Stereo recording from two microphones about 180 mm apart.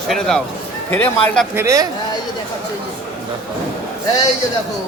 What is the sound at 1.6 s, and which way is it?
Speech, 15° right (ahead or behind).